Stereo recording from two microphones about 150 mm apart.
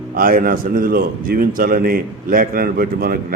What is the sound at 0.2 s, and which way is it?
A man's voice, 70° right (ahead or behind).